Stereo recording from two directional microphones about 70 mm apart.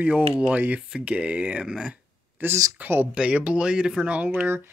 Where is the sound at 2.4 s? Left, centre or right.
Right.